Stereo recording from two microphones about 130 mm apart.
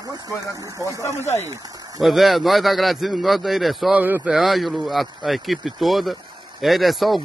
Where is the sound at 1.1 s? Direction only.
60° left (ahead or behind).